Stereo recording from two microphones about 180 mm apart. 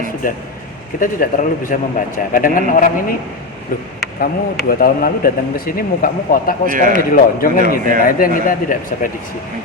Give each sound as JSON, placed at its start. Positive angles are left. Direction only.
{"t": 0.2, "sound": "speech", "side_deg": 50}
{"t": 6.7, "sound": "a man's voice", "side_deg": -50}
{"t": 6.9, "sound": "speech", "side_deg": 50}